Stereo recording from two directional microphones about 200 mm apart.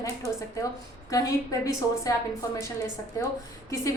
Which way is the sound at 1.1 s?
15° left (ahead or behind).